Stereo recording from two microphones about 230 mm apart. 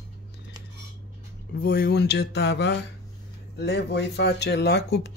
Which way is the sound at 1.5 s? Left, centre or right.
Left.